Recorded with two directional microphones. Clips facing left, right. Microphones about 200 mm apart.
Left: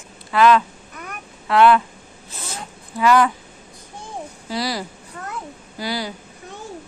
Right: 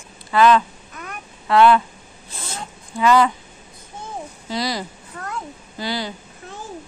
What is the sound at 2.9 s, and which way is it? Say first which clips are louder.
Speech: even; 5° left (ahead or behind).